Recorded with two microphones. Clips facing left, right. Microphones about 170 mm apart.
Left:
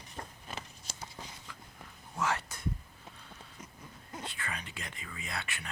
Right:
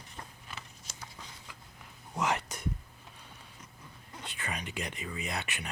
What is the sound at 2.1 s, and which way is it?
Whispering, 20° right (ahead or behind).